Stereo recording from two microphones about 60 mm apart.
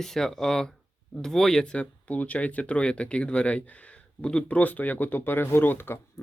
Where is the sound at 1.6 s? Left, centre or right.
Centre.